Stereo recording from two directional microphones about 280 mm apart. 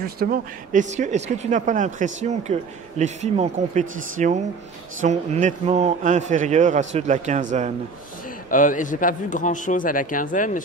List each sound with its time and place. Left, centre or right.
0.0 s speech: right
8.5 s a man's voice: left